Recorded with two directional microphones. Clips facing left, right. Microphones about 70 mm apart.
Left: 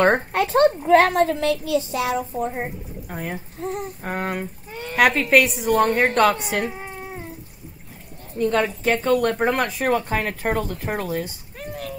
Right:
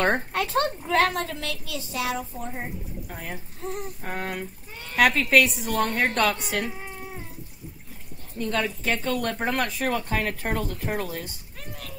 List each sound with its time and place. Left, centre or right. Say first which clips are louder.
0.0 s speech: left 6 dB; left
8.4 s speech: left 6 dB; left